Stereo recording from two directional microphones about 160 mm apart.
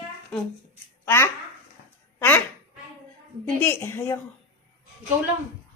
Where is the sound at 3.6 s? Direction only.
15° left (ahead or behind).